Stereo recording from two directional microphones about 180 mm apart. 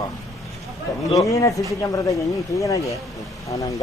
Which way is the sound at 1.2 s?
20° left (ahead or behind).